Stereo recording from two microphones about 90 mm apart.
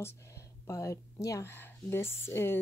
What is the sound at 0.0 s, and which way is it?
Speech, 30° left (ahead or behind).